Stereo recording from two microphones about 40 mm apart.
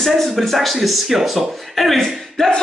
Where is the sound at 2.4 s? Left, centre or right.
Centre.